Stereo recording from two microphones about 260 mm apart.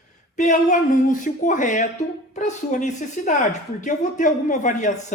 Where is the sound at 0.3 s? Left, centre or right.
Left.